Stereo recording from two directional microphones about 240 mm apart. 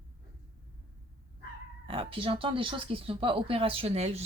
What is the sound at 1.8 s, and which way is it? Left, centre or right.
Speech, right.